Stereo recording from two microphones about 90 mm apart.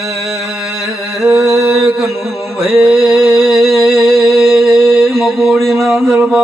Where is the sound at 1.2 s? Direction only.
35° right (ahead or behind).